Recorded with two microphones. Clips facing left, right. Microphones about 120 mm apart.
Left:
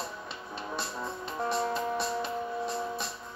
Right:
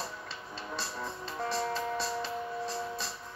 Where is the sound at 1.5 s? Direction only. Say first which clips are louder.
Left 3 dB; 15° left (ahead or behind).